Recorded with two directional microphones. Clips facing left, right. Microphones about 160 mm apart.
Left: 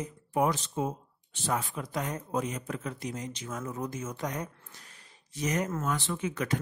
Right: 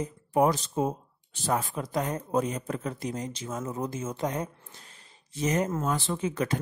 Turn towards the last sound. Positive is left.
turn(degrees=-30)  # may be behind; listen again after turning